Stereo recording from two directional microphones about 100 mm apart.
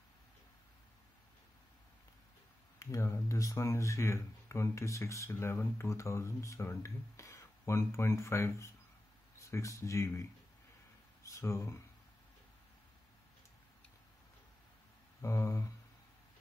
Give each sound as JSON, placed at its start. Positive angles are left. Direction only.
{"t": 2.8, "sound": "speech", "side_deg": 30}
{"t": 11.2, "sound": "speech", "side_deg": 30}
{"t": 15.2, "sound": "speech", "side_deg": 30}